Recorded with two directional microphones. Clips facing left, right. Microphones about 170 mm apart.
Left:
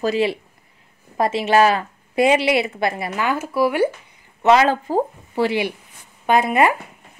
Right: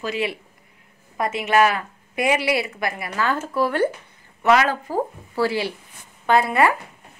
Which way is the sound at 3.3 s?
10° left (ahead or behind).